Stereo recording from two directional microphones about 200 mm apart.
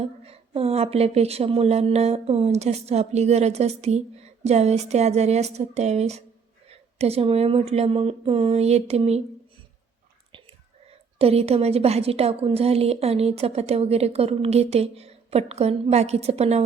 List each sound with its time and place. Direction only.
0.0 s speech: 30° right (ahead or behind)
10.3 s speech: 30° right (ahead or behind)